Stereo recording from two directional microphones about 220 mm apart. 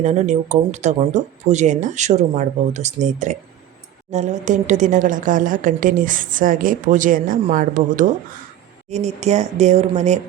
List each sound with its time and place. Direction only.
0.0 s a woman's voice: 30° right (ahead or behind)